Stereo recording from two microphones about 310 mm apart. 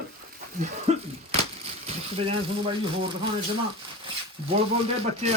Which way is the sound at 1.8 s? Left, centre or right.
Centre.